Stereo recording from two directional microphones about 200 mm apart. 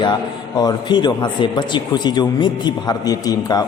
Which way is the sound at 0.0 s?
20° left (ahead or behind).